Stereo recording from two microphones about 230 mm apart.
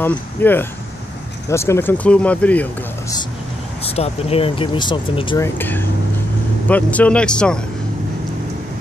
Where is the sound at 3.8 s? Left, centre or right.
Left; by 7.5 s centre.